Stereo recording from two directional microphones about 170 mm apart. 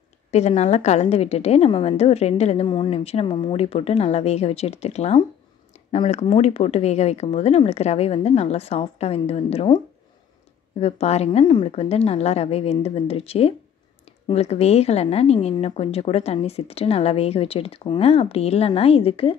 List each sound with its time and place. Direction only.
0.3 s a woman's voice: 40° left (ahead or behind)
10.8 s a woman's voice: 35° left (ahead or behind)